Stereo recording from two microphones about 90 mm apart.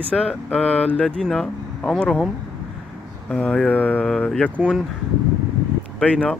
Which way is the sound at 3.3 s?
15° left (ahead or behind).